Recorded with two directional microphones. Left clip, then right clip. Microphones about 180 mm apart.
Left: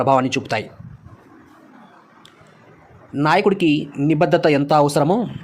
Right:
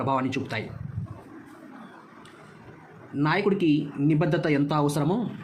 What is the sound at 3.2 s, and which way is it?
Speech, 35° left (ahead or behind).